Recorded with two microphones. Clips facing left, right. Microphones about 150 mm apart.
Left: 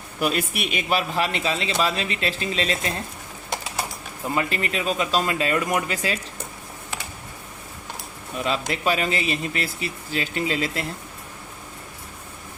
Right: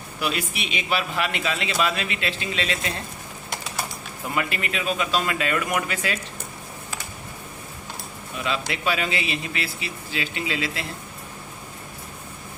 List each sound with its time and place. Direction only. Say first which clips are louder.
0.2 s a man's voice: left 4 dB; 50° left (ahead or behind)
4.4 s a man's voice: left 1 dB; 35° left (ahead or behind)
8.4 s a man's voice: left 2 dB; 40° left (ahead or behind)